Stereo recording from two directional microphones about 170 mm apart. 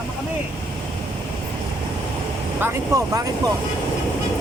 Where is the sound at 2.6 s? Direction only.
15° right (ahead or behind).